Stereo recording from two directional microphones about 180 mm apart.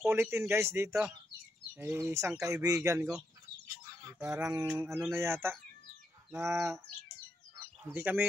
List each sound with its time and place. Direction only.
0.0 s speech: 15° right (ahead or behind)
7.8 s speech: 10° right (ahead or behind)